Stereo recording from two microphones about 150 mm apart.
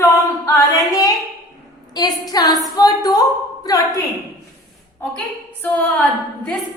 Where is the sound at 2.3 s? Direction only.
25° left (ahead or behind).